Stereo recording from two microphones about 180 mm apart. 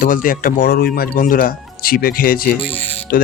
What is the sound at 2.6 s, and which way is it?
Music, 30° left (ahead or behind).